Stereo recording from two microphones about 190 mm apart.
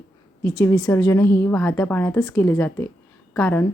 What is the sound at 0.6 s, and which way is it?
A woman's voice, 15° left (ahead or behind).